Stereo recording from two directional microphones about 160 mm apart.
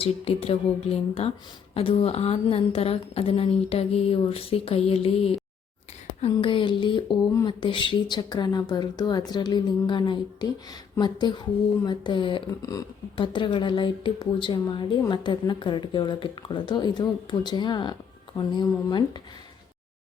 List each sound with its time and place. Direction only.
0.0 s a woman's voice: 40° left (ahead or behind)